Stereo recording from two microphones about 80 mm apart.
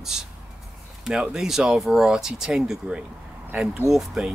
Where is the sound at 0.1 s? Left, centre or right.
Centre.